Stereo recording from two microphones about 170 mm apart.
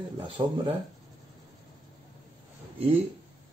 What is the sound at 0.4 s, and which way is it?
Speech, 30° right (ahead or behind).